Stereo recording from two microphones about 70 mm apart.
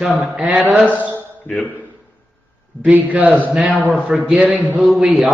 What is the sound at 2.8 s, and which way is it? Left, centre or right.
Speech, right.